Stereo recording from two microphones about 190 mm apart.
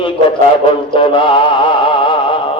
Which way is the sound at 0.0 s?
25° left (ahead or behind).